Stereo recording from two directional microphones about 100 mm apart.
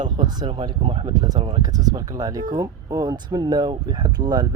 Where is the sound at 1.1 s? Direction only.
40° right (ahead or behind).